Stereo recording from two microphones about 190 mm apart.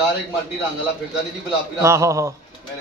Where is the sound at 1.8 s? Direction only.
15° right (ahead or behind).